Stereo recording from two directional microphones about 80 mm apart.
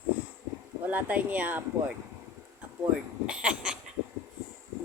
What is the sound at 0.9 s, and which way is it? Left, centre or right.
Speech, centre.